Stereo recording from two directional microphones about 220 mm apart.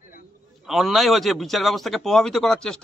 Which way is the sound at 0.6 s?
Centre (ahead or behind).